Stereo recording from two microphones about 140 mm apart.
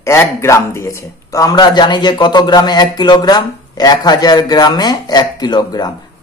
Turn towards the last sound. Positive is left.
turn(degrees=30)  # may be behind; listen again after turning